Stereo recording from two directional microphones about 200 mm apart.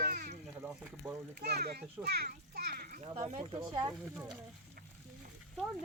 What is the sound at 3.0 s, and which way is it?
Speech, 30° right (ahead or behind).